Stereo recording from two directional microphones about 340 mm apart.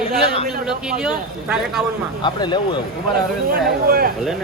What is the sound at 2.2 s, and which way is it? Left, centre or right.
Speech, centre.